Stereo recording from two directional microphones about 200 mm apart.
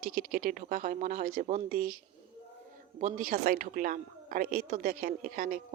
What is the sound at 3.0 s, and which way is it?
A woman's voice, 40° right (ahead or behind).